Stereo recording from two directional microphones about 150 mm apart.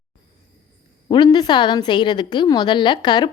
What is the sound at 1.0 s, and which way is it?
A woman's voice, 30° left (ahead or behind).